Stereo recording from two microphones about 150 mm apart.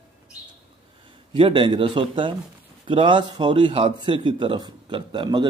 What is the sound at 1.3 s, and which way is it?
Speech, 35° right (ahead or behind).